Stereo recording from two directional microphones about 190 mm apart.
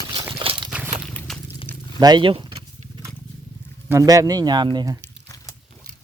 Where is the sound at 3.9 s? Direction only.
15° right (ahead or behind).